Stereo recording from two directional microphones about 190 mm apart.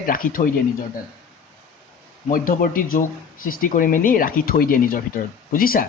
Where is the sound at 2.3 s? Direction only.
50° left (ahead or behind).